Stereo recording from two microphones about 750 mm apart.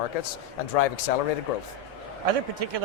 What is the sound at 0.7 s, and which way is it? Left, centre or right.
Speech, left.